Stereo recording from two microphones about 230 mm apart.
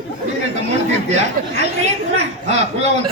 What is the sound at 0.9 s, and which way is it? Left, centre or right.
A man's voice, right.